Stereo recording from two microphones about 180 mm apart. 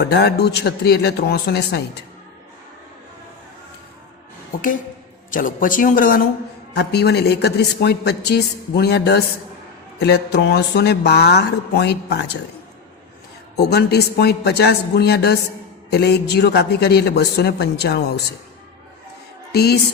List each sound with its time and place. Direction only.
0.0 s a woman's voice: 65° left (ahead or behind)
5.3 s speech: 50° left (ahead or behind)
6.7 s a woman's voice: 65° left (ahead or behind)
13.6 s a woman's voice: 65° left (ahead or behind)
19.5 s a woman's voice: 65° left (ahead or behind)